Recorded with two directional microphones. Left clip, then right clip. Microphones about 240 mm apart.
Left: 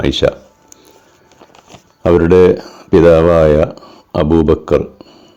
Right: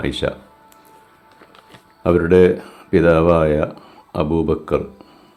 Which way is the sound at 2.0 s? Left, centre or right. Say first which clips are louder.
Left 5 dB; left.